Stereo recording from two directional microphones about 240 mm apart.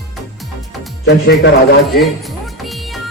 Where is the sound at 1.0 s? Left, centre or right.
Left.